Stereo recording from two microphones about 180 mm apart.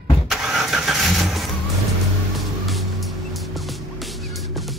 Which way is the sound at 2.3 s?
Centre (ahead or behind).